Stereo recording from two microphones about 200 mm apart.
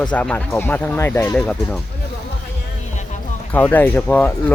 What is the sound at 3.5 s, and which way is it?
Speech, 10° left (ahead or behind).